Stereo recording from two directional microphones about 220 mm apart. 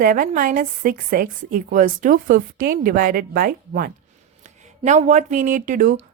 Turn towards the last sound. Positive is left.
turn(degrees=-35)  # may be behind; listen again after turning